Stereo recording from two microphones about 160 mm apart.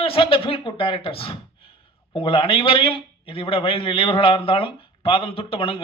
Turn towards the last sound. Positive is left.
turn(degrees=35)  # may be behind; listen again after turning